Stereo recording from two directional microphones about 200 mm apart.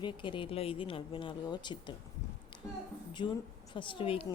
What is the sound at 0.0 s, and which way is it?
Speech, 25° left (ahead or behind).